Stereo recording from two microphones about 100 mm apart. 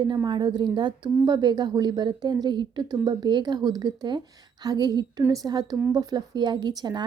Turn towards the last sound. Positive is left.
turn(degrees=-45)  # may be behind; listen again after turning